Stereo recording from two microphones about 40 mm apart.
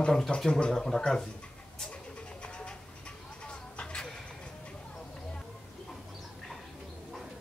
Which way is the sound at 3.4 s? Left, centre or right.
Left.